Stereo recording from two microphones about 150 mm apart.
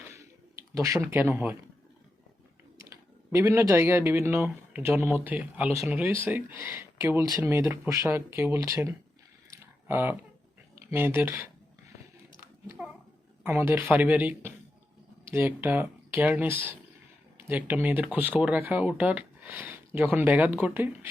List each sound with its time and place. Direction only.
0.7 s speech: 20° right (ahead or behind)
3.3 s speech: 20° right (ahead or behind)
13.4 s speech: 15° right (ahead or behind)